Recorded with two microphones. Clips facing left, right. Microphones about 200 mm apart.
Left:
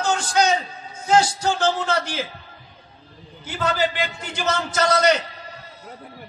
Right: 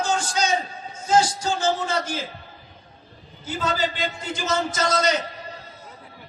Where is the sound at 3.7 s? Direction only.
65° left (ahead or behind).